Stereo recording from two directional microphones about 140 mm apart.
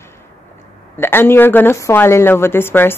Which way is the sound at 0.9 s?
15° left (ahead or behind).